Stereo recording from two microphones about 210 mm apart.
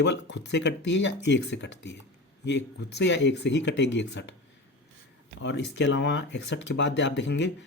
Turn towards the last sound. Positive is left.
turn(degrees=55)  # may be behind; listen again after turning